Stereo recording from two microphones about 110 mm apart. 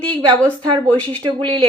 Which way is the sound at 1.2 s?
45° right (ahead or behind).